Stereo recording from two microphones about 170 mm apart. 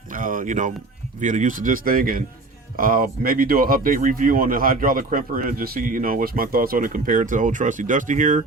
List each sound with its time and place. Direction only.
0.1 s speech: 50° right (ahead or behind)